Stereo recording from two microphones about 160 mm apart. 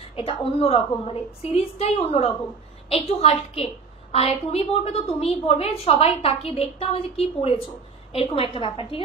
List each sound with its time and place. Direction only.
0.1 s a woman's voice: 35° left (ahead or behind)